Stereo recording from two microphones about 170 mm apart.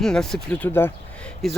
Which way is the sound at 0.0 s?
5° left (ahead or behind).